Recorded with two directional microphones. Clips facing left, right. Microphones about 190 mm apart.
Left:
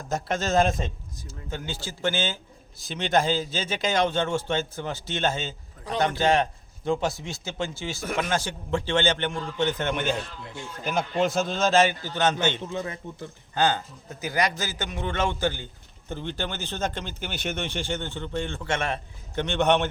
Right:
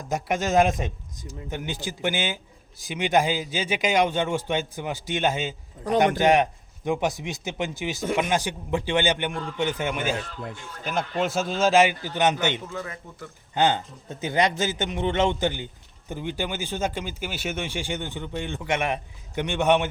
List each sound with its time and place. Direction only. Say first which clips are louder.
0.1 s a man's voice: right 2 dB; 15° right (ahead or behind)
12.6 s a man's voice: left 3 dB; 25° left (ahead or behind)
13.6 s a man's voice: right 2 dB; 20° right (ahead or behind)